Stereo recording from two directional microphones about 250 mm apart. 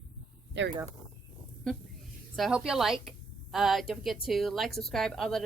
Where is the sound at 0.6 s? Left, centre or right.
Right.